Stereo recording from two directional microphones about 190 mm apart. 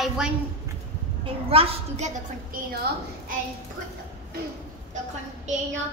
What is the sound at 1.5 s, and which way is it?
Speech, 30° right (ahead or behind).